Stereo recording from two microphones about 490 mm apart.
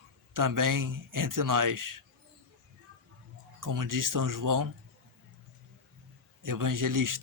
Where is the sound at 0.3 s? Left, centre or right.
Right.